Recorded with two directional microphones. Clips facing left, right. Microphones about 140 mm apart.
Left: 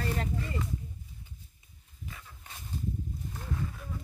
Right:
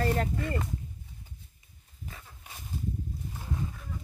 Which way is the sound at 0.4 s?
60° right (ahead or behind).